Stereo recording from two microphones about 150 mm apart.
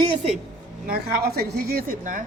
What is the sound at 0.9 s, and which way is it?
A woman's voice, 90° right.